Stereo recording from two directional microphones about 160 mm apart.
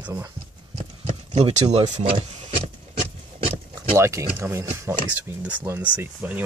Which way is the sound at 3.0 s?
40° right (ahead or behind).